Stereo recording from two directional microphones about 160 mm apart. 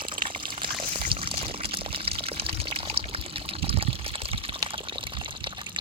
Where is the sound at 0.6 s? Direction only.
35° right (ahead or behind).